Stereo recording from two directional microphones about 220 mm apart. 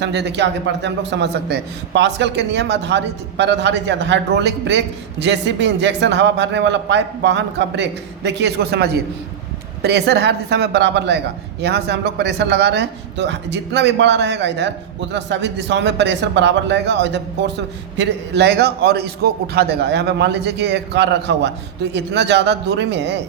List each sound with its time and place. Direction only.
0.0 s a man's voice: 50° right (ahead or behind)